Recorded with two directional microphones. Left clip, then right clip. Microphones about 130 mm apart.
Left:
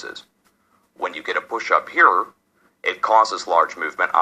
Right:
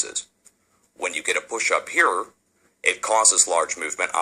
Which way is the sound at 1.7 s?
65° right (ahead or behind).